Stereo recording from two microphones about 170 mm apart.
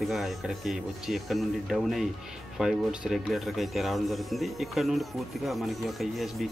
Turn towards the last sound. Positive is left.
turn(degrees=0)  # may be behind; listen again after turning